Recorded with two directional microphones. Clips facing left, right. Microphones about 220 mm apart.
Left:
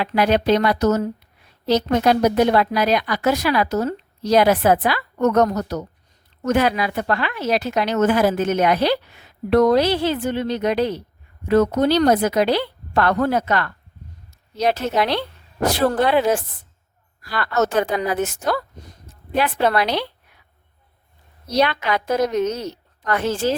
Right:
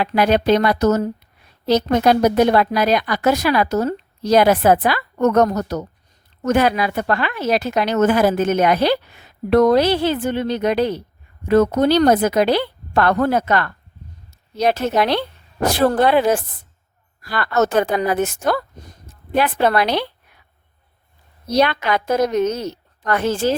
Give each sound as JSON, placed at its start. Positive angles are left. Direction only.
{"t": 0.0, "sound": "a woman's voice", "side_deg": -45}
{"t": 21.5, "sound": "a woman's voice", "side_deg": -45}